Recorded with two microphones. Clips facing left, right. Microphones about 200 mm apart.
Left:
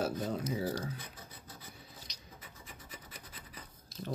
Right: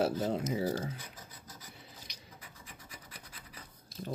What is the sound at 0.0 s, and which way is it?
Speech, 30° right (ahead or behind).